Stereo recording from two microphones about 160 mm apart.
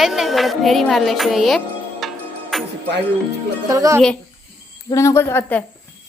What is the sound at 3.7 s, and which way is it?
Speech, 20° right (ahead or behind).